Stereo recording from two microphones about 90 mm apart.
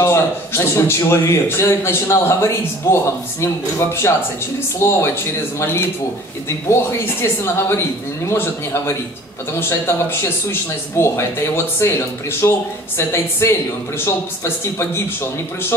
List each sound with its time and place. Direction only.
0.0 s a man's voice: 30° left (ahead or behind)